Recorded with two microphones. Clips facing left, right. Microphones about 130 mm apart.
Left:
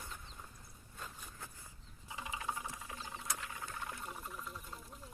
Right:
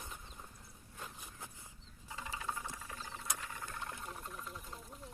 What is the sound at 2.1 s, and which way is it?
Rodents, 15° left (ahead or behind).